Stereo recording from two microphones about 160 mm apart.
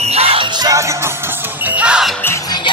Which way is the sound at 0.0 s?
40° right (ahead or behind).